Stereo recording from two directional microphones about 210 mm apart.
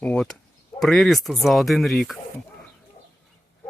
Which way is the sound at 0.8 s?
Centre (ahead or behind).